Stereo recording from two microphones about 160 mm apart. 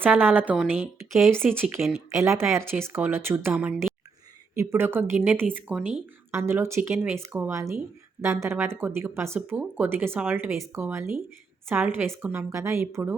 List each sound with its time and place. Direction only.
0.0 s speech: 10° right (ahead or behind)
1.5 s speech: 10° right (ahead or behind)
1.8 s speech: centre (ahead or behind)
2.2 s speech: 15° right (ahead or behind)